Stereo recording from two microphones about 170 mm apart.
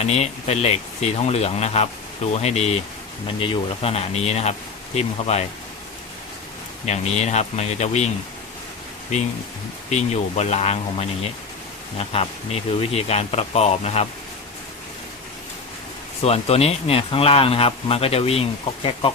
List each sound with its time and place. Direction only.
0.0 s speech: 40° left (ahead or behind)
6.8 s speech: 40° left (ahead or behind)
9.1 s speech: 45° left (ahead or behind)
16.2 s speech: 35° left (ahead or behind)